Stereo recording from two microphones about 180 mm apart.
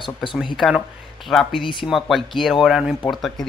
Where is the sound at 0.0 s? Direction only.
25° left (ahead or behind).